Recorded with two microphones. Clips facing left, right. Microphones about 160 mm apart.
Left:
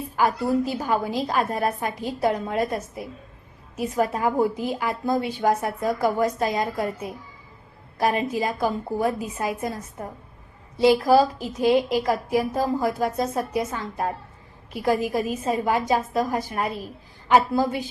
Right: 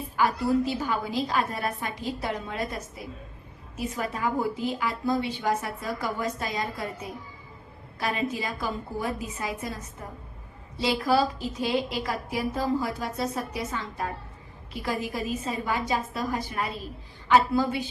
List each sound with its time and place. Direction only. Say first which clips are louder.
0.2 s a woman's voice: left 2 dB; 45° left (ahead or behind)
7.9 s a woman's voice: left 6 dB; 50° left (ahead or behind)
10.8 s a woman's voice: left 7 dB; 50° left (ahead or behind)